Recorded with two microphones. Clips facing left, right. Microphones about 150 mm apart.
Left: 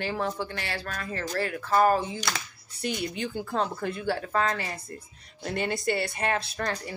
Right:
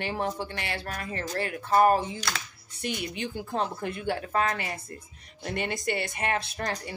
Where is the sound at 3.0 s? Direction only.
40° left (ahead or behind).